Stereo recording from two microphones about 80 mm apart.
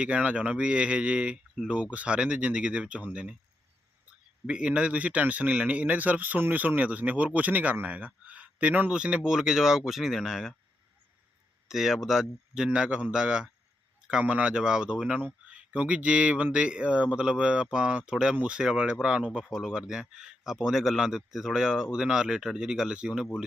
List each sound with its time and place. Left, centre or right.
0.0 s speech: centre
4.4 s speech: centre
11.7 s speech: centre